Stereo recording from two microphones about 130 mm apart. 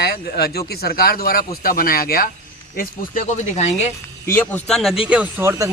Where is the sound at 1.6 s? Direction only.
90° left.